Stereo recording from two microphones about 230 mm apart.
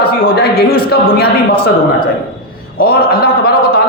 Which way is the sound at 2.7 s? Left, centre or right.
Left.